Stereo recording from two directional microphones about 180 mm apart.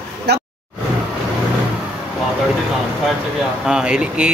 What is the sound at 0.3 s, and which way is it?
Speech, 65° right (ahead or behind).